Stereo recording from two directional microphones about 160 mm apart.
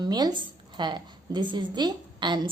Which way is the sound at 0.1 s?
25° right (ahead or behind).